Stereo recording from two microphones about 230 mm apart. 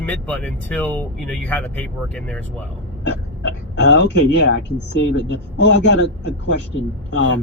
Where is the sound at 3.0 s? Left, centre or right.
Left.